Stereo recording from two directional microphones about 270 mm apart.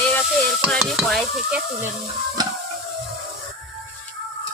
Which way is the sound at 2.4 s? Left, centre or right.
Centre.